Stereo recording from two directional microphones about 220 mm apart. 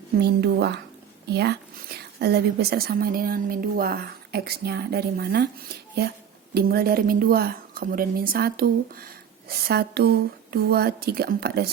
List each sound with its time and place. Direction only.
0.2 s a woman's voice: 45° right (ahead or behind)